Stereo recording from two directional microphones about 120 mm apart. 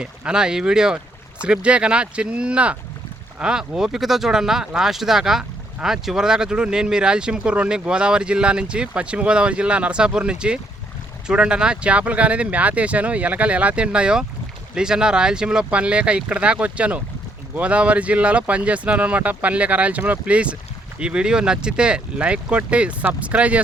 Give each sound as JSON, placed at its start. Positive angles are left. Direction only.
{"t": 0.0, "sound": "speech", "side_deg": -5}